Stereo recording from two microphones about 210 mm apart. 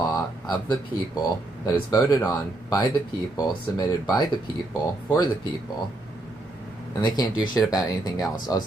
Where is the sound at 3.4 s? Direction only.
20° left (ahead or behind).